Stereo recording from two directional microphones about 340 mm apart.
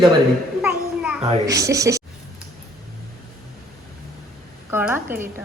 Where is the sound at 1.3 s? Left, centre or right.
Centre.